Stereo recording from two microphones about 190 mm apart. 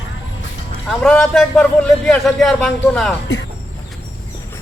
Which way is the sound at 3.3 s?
70° left (ahead or behind).